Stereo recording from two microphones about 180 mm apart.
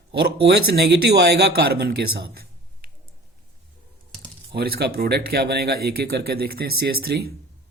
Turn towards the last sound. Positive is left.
turn(degrees=-60)  # may be behind; listen again after turning